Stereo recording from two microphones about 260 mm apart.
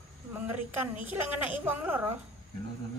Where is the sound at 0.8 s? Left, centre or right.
Centre.